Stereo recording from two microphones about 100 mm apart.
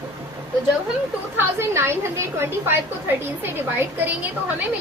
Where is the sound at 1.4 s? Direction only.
25° right (ahead or behind).